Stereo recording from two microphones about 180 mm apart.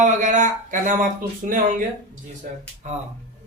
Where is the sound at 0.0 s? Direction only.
45° right (ahead or behind).